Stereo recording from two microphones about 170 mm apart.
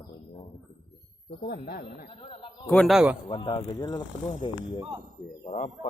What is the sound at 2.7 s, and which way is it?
Speech, centre (ahead or behind).